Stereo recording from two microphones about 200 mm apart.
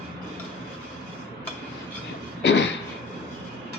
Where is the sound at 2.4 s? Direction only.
60° left (ahead or behind).